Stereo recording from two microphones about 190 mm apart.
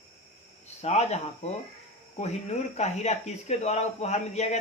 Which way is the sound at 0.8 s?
35° left (ahead or behind).